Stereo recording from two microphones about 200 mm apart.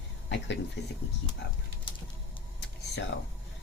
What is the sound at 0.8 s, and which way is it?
Speech, 60° left (ahead or behind).